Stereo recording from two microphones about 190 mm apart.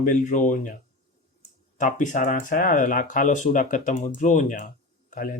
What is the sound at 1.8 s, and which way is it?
Speech, 40° left (ahead or behind).